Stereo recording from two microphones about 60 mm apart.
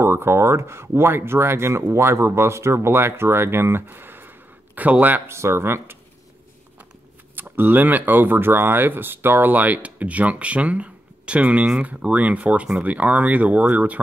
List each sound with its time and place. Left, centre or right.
0.0 s speech: right
5.3 s speech: right
7.3 s speech: right